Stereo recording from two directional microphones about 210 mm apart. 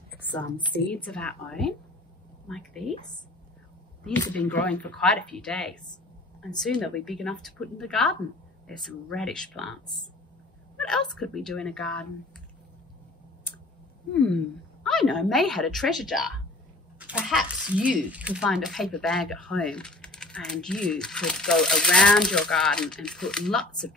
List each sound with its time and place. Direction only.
0.9 s speech: 5° left (ahead or behind)
4.3 s speech: 5° left (ahead or behind)
10.8 s speech: 5° left (ahead or behind)
14.1 s speech: 5° left (ahead or behind)